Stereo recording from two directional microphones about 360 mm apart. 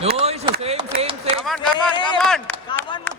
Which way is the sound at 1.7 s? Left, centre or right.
Centre.